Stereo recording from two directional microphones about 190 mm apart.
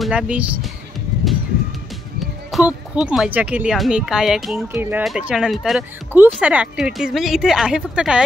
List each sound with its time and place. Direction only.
0.0 s speech: 5° right (ahead or behind)
2.5 s speech: 5° right (ahead or behind)